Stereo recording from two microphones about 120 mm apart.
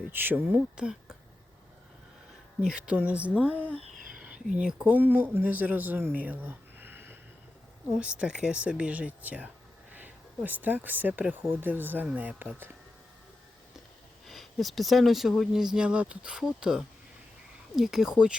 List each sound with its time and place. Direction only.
0.1 s speech: 15° right (ahead or behind)
2.6 s speech: 10° right (ahead or behind)
6.1 s a sound: 15° right (ahead or behind)
7.9 s speech: 10° right (ahead or behind)
14.3 s speech: centre (ahead or behind)